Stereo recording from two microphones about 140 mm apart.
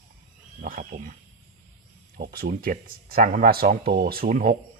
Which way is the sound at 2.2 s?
90° right.